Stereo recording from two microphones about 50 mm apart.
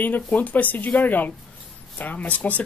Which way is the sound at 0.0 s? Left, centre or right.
Left.